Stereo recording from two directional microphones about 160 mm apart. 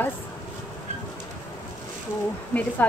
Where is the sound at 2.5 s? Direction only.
10° left (ahead or behind).